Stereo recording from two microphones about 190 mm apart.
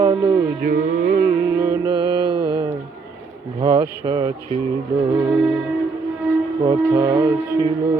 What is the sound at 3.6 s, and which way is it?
Speech, 25° right (ahead or behind).